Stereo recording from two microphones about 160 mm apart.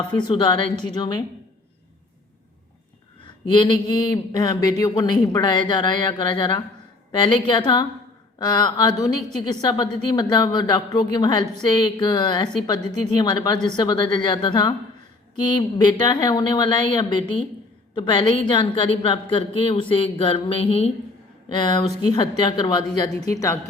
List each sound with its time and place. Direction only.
0.1 s a woman's voice: 30° left (ahead or behind)
3.5 s a woman's voice: 30° left (ahead or behind)